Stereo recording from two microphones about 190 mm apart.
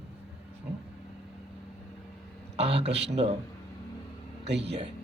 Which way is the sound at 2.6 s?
30° right (ahead or behind).